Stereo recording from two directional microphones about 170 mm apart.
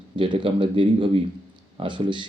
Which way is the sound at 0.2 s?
30° right (ahead or behind).